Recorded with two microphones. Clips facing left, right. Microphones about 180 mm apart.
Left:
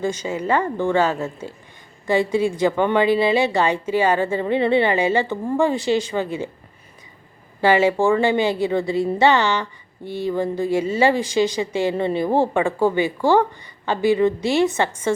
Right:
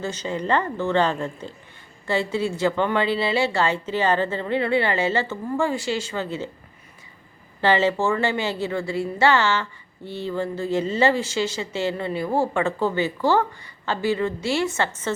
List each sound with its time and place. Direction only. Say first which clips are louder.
0.0 s a woman's voice: left 4 dB; 10° left (ahead or behind)
7.6 s a woman's voice: left 4 dB; 10° left (ahead or behind)